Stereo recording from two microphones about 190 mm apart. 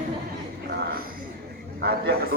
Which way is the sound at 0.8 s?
50° right (ahead or behind).